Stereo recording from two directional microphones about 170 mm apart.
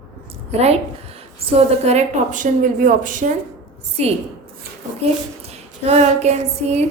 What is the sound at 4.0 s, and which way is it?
A woman's voice, 40° right (ahead or behind).